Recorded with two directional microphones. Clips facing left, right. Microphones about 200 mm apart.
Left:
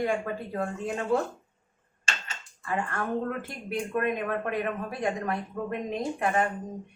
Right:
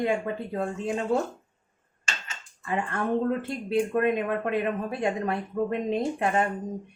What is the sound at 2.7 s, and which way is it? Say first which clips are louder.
Speech: right 3 dB; 20° right (ahead or behind).